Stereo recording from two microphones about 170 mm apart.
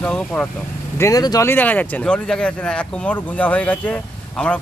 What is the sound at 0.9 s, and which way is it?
Speech, 20° left (ahead or behind).